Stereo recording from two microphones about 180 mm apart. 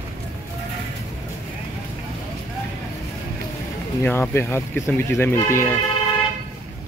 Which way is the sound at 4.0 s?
15° left (ahead or behind).